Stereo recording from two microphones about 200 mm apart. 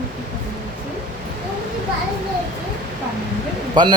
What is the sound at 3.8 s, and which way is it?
Speech, 20° right (ahead or behind).